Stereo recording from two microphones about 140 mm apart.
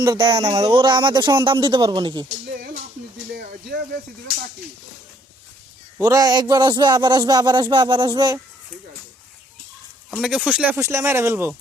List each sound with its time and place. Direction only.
0.0 s a man's voice: 25° right (ahead or behind)
0.6 s speech: 35° right (ahead or behind)
6.0 s a man's voice: 25° right (ahead or behind)
10.2 s speech: 5° right (ahead or behind)
10.8 s speech: 20° right (ahead or behind)